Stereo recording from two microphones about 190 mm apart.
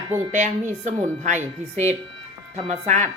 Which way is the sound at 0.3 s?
40° right (ahead or behind).